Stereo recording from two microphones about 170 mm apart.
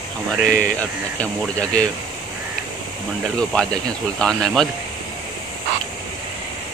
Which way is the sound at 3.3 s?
5° left (ahead or behind).